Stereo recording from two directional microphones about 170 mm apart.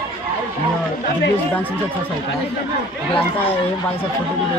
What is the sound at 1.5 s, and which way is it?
Speech, 10° left (ahead or behind).